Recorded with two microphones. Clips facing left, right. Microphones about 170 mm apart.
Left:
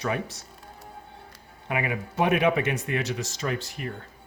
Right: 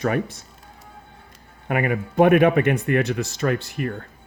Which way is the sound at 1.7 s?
55° right (ahead or behind).